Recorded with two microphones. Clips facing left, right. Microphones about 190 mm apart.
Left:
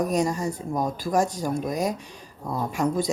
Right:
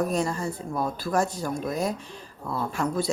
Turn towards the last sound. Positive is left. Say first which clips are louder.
# left 2 dB
turn(degrees=15)  # may be behind; listen again after turning